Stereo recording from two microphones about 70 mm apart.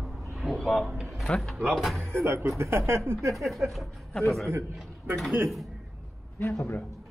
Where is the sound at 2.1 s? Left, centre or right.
Right.